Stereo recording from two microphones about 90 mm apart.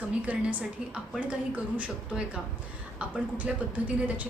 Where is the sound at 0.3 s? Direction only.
15° right (ahead or behind).